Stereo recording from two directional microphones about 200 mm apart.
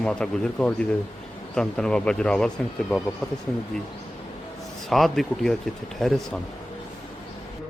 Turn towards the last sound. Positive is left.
turn(degrees=0)  # may be behind; listen again after turning